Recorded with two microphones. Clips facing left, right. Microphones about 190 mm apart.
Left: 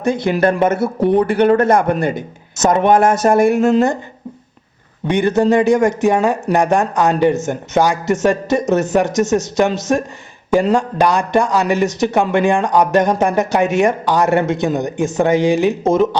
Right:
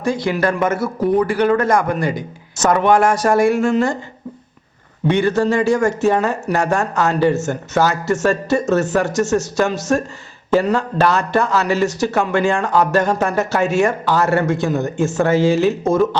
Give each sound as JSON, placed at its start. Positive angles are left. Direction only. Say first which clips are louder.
{"t": 0.0, "sound": "speech", "louder": "left 3 dB", "side_deg": 20}
{"t": 5.0, "sound": "speech", "louder": "left 2 dB", "side_deg": 15}